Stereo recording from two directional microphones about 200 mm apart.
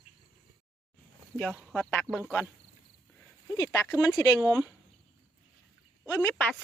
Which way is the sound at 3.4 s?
15° left (ahead or behind).